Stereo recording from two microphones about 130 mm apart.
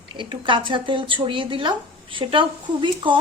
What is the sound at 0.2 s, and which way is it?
Speech, 40° right (ahead or behind).